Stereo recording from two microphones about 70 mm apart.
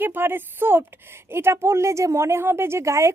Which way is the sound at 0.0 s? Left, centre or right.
Right.